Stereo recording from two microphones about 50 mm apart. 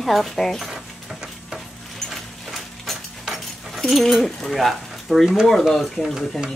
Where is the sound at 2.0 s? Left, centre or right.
Centre.